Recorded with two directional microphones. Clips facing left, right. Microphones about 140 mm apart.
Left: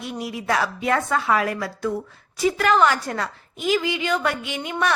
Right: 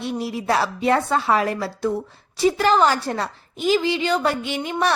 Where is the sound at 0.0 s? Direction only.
30° right (ahead or behind).